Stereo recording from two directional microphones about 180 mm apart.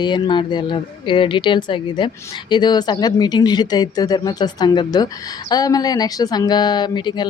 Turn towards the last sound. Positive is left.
turn(degrees=25)  # may be behind; listen again after turning